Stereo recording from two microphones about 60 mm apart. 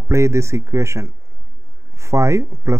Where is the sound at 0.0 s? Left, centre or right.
Right.